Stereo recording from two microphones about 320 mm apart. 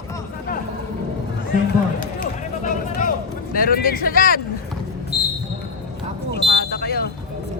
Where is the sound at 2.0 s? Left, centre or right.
Left.